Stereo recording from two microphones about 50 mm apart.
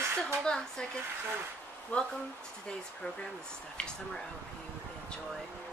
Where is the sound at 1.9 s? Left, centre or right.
Left.